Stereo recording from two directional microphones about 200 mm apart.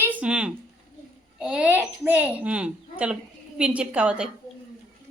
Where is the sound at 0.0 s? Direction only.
5° right (ahead or behind).